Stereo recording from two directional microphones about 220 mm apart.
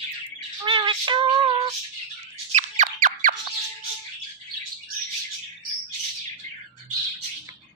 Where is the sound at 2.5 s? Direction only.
30° right (ahead or behind).